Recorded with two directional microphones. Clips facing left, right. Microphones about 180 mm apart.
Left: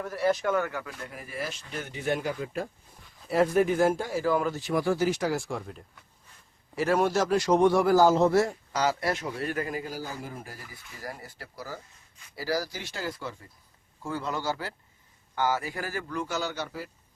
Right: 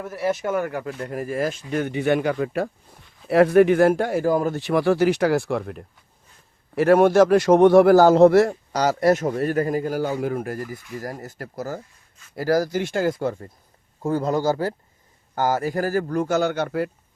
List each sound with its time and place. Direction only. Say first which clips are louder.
0.1 s speech: right 2 dB; 25° right (ahead or behind)
1.0 s a man's voice: right 11 dB; 45° right (ahead or behind)
4.5 s a man's voice: right 7 dB; 70° right (ahead or behind)
8.7 s a man's voice: right 9 dB; 40° right (ahead or behind)
9.9 s a man's voice: right 13 dB; 75° right (ahead or behind)